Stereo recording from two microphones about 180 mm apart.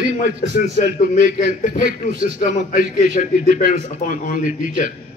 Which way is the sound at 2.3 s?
50° left (ahead or behind).